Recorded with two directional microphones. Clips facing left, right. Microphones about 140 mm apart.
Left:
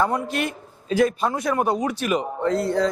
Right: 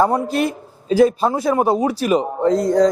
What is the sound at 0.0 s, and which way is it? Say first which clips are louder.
A man's voice: right 6 dB; 35° right (ahead or behind).